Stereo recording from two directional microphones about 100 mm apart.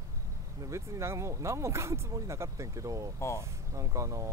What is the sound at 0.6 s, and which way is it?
Speech, 30° right (ahead or behind).